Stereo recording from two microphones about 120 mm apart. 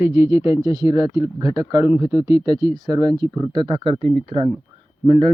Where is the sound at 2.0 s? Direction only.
55° left (ahead or behind).